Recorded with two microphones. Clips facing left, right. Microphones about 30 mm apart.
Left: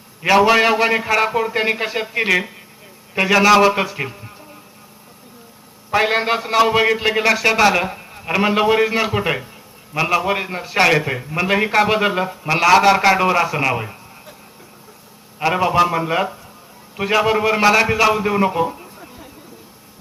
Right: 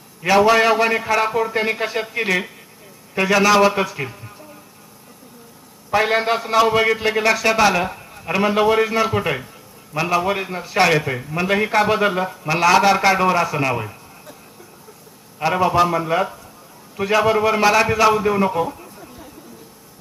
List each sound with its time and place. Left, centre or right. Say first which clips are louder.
0.2 s a man's voice: left 1 dB; centre
5.9 s a man's voice: left 1 dB; centre
15.4 s a man's voice: left 1 dB; centre